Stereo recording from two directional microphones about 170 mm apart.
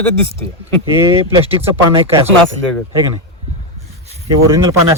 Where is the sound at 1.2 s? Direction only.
35° right (ahead or behind).